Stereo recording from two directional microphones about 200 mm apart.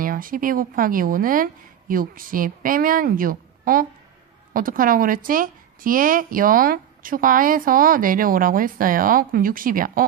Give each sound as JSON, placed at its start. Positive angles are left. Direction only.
{"t": 0.0, "sound": "a woman's voice", "side_deg": -45}